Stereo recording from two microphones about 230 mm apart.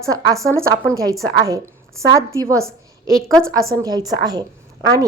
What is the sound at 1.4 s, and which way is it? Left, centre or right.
A woman's voice, centre.